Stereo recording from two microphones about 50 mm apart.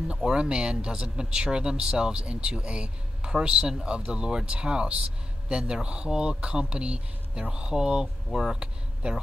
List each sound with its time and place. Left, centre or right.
0.1 s speech: centre